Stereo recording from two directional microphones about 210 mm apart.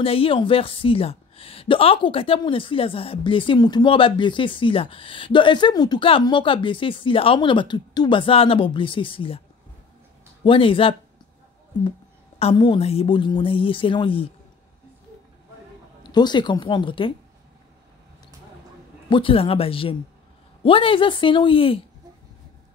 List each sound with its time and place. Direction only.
0.0 s a woman's voice: 25° left (ahead or behind)
10.4 s a woman's voice: 25° left (ahead or behind)
12.4 s a woman's voice: 25° left (ahead or behind)
16.0 s a woman's voice: 20° left (ahead or behind)
19.0 s a woman's voice: 25° left (ahead or behind)